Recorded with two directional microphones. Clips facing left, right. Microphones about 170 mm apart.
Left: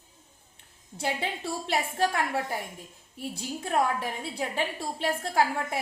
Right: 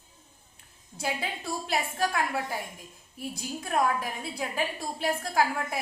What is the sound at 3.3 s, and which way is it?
A woman's voice, 25° left (ahead or behind).